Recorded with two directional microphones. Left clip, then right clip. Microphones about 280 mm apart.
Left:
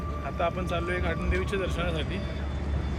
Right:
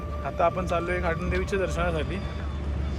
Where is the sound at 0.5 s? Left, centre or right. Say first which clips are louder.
Right 3 dB; centre.